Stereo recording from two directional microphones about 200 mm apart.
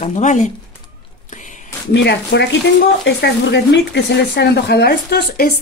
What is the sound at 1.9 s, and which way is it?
Speech, 60° left (ahead or behind).